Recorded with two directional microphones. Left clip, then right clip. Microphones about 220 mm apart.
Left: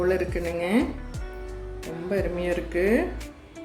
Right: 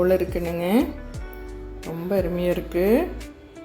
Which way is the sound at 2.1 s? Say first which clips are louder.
Right 3 dB; 30° right (ahead or behind).